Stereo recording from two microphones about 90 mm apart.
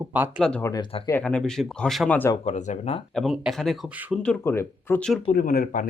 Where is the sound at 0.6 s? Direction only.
40° left (ahead or behind).